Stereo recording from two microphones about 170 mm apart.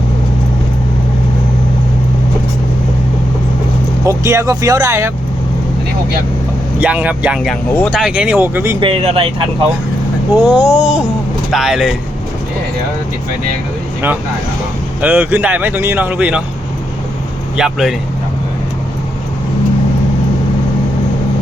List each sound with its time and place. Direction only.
4.0 s speech: 15° right (ahead or behind)
6.7 s speech: 10° right (ahead or behind)
8.8 s speech: 35° right (ahead or behind)
10.3 s speech: 10° right (ahead or behind)
15.0 s speech: 10° right (ahead or behind)
17.6 s speech: centre (ahead or behind)